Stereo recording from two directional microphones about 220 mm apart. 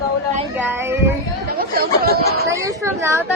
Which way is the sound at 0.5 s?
10° right (ahead or behind).